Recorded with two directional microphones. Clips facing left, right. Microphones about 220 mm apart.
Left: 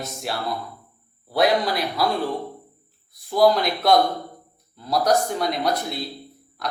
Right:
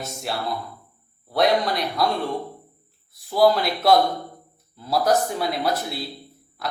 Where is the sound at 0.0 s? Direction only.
Centre (ahead or behind).